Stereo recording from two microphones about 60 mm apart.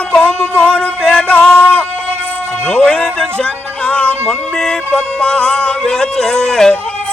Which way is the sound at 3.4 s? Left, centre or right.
Left.